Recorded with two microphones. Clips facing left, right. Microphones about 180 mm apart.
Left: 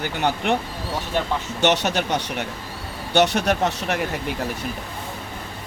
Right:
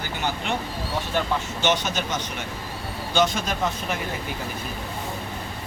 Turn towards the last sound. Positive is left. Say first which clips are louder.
# left 4 dB
turn(degrees=75)  # may be behind; listen again after turning